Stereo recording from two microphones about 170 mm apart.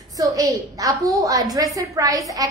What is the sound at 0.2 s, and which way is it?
A woman's voice, 20° right (ahead or behind).